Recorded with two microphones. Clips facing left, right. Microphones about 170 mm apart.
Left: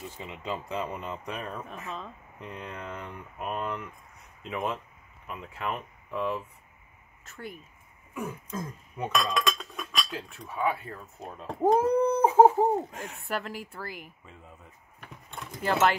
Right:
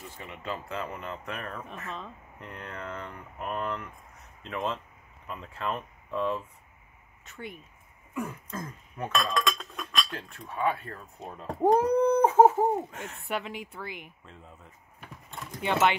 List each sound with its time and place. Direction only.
0.2 s speech: 15° left (ahead or behind)
1.9 s speech: centre (ahead or behind)
2.4 s speech: 15° left (ahead or behind)
7.2 s speech: centre (ahead or behind)
9.3 s speech: centre (ahead or behind)
13.3 s speech: centre (ahead or behind)
15.3 s speech: centre (ahead or behind)